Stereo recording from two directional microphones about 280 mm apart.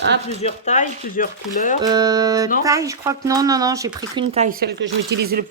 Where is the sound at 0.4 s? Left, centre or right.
Left.